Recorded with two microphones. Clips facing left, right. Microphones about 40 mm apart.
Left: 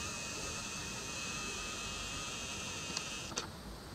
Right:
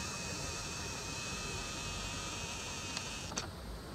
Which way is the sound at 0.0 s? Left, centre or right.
Left.